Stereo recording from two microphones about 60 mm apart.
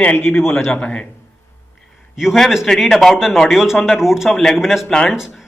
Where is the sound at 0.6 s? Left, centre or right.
Centre.